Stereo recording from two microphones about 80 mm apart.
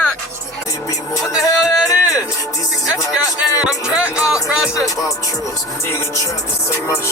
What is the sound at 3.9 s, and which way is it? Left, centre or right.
Speech, centre.